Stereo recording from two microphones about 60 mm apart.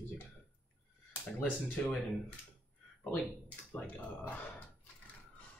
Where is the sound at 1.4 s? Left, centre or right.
Left.